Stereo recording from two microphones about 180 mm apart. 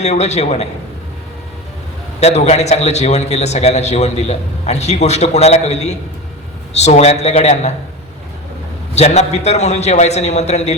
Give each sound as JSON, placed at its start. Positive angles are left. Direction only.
{"t": 0.0, "sound": "a man's voice", "side_deg": 40}
{"t": 2.2, "sound": "a man's voice", "side_deg": 35}
{"t": 9.0, "sound": "a man's voice", "side_deg": 40}